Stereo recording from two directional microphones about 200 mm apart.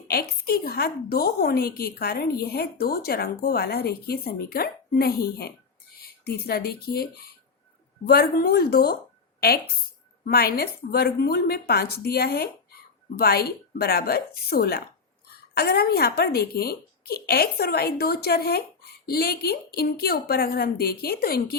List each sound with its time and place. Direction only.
0.1 s a woman's voice: 50° left (ahead or behind)
10.2 s a woman's voice: 50° left (ahead or behind)